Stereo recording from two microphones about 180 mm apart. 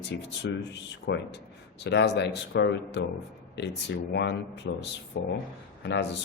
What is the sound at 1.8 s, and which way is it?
A man's voice, 70° left (ahead or behind).